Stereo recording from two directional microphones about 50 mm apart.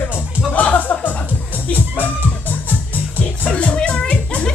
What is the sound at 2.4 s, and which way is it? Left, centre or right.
Music, left.